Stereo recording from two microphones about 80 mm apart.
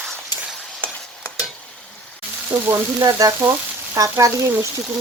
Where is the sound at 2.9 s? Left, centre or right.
Right.